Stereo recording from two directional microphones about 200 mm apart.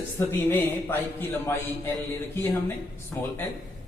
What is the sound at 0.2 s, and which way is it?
A man's voice, 10° left (ahead or behind).